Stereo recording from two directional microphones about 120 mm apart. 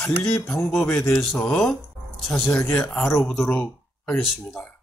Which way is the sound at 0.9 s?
20° left (ahead or behind).